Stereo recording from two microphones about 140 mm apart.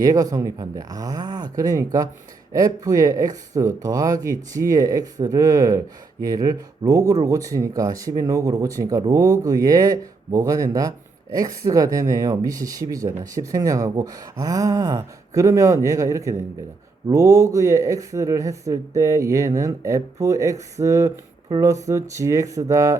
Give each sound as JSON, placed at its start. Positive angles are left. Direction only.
{"t": 0.0, "sound": "speech", "side_deg": -25}